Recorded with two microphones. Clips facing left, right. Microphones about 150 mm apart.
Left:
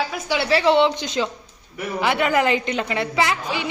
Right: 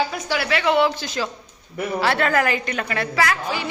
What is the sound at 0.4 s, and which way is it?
A woman's voice, 30° left (ahead or behind).